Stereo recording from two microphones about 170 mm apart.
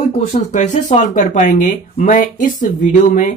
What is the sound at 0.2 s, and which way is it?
Speech, 45° left (ahead or behind).